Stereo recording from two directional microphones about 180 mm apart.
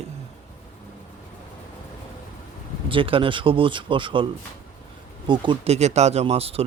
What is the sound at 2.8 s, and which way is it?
A man's voice, 30° right (ahead or behind).